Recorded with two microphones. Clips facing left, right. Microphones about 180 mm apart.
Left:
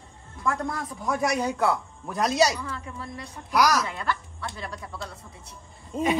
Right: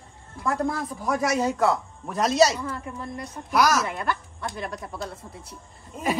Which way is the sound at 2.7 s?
50° right (ahead or behind).